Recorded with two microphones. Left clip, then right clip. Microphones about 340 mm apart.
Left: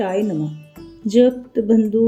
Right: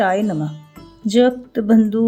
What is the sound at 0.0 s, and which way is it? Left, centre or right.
Speech, right.